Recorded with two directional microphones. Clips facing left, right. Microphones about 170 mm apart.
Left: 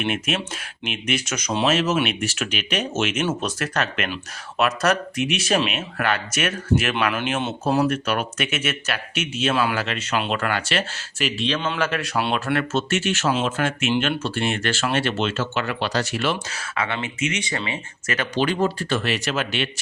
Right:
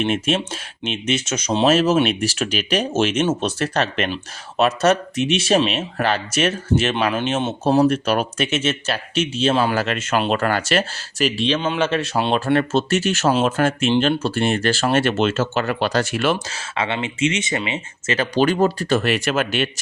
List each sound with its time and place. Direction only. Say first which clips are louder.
0.0 s speech: right 5 dB; 30° right (ahead or behind)
9.8 s speech: right 4 dB; 50° right (ahead or behind)
16.5 s speech: right 3 dB; 25° right (ahead or behind)
18.3 s speech: right 4 dB; 45° right (ahead or behind)